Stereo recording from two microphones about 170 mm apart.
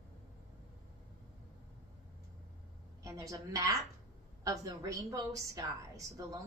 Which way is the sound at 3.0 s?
20° right (ahead or behind).